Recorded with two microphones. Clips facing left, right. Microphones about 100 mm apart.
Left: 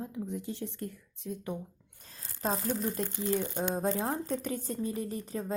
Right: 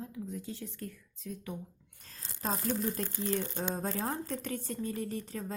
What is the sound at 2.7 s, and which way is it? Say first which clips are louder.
Speech: left 1 dB; 10° left (ahead or behind).